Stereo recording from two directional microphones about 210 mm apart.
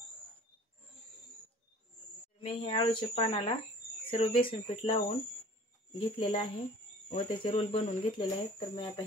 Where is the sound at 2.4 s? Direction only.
25° left (ahead or behind).